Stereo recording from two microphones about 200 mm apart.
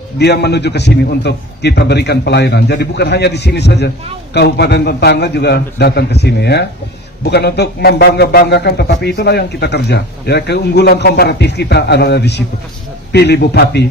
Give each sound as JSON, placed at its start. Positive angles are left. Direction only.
{"t": 0.2, "sound": "a man's voice", "side_deg": 55}